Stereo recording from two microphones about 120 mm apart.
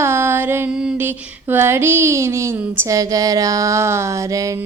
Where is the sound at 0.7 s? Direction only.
10° right (ahead or behind).